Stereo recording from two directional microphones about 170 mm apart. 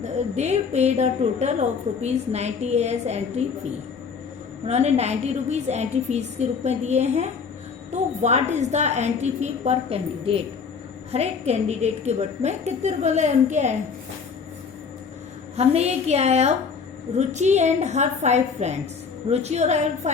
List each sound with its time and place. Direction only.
0.0 s a woman's voice: 40° right (ahead or behind)
4.6 s a woman's voice: 40° right (ahead or behind)
15.5 s a woman's voice: 40° right (ahead or behind)